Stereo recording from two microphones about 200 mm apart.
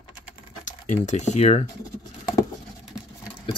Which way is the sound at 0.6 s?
35° left (ahead or behind).